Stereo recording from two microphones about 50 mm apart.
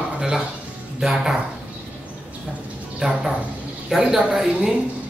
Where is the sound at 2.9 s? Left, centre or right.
Centre.